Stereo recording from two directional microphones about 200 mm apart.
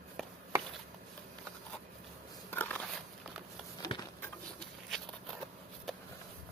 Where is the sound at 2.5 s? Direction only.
10° left (ahead or behind).